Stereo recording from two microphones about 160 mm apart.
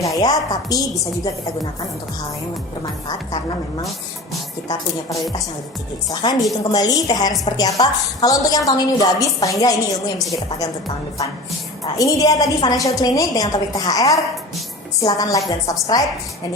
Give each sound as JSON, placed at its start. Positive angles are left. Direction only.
{"t": 0.0, "sound": "a woman's voice", "side_deg": 20}
{"t": 4.7, "sound": "a woman's voice", "side_deg": 25}
{"t": 10.2, "sound": "a woman's voice", "side_deg": 0}
{"t": 10.6, "sound": "a woman's voice", "side_deg": 25}